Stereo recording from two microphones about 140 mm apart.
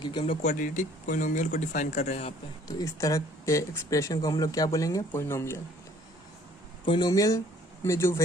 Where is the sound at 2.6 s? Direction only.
25° left (ahead or behind).